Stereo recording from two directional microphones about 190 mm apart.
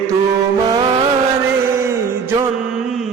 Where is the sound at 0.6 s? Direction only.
20° right (ahead or behind).